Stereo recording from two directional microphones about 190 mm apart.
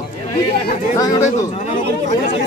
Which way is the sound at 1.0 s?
15° left (ahead or behind).